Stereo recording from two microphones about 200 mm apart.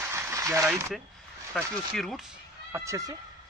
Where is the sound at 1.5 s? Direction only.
Centre (ahead or behind).